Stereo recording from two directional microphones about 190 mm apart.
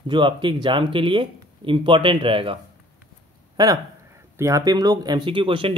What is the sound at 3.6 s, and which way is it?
Speech, 15° right (ahead or behind).